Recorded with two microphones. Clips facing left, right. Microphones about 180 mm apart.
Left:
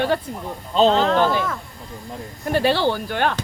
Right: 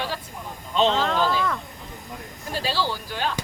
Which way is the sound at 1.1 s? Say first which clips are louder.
Left 5 dB; 65° left (ahead or behind).